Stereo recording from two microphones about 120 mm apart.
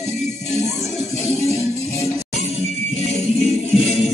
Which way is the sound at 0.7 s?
Centre (ahead or behind).